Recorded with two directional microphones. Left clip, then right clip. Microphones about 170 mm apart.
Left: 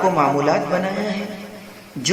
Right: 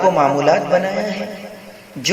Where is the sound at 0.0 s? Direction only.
20° right (ahead or behind).